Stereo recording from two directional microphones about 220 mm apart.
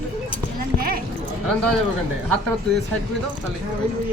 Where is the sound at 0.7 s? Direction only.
40° right (ahead or behind).